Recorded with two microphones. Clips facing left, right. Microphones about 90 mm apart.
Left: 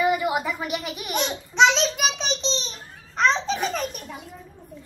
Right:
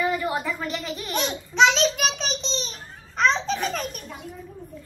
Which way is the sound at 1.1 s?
Centre (ahead or behind).